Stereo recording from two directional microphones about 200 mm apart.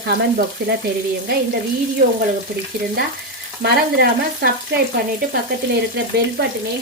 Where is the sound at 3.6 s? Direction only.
55° right (ahead or behind).